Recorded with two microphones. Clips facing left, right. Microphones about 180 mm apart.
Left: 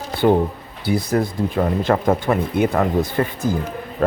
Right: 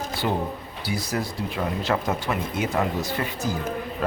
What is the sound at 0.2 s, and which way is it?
A man's voice, 50° left (ahead or behind).